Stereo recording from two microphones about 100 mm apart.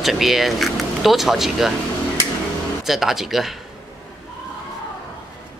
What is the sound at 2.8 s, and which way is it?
Speech, 5° right (ahead or behind).